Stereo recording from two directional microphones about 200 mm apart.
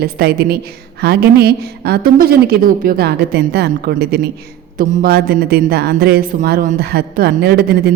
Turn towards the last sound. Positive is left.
turn(degrees=-50)  # may be behind; listen again after turning